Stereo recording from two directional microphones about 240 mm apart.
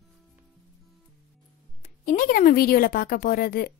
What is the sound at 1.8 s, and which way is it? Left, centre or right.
A woman's voice, left.